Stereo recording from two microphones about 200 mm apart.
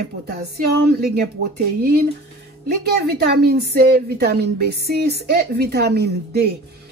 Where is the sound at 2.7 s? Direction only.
55° right (ahead or behind).